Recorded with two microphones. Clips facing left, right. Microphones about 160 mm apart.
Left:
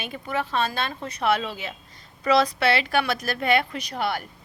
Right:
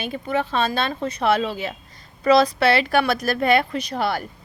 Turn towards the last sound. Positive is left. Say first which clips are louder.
# right 4 dB
turn(degrees=-35)  # may be behind; listen again after turning